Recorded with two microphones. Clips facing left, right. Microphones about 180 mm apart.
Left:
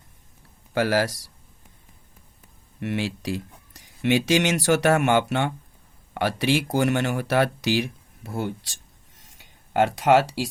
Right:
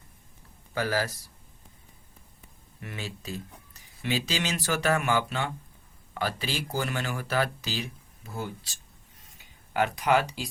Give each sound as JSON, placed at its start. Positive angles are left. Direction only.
{"t": 0.7, "sound": "a man's voice", "side_deg": 75}
{"t": 2.8, "sound": "speech", "side_deg": 80}
{"t": 4.0, "sound": "speech", "side_deg": 75}
{"t": 9.8, "sound": "speech", "side_deg": 85}